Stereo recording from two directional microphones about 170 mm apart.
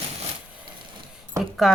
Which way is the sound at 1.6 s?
Centre (ahead or behind).